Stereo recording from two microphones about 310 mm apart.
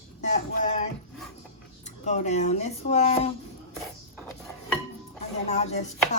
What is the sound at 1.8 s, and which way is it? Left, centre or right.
A woman's voice, left.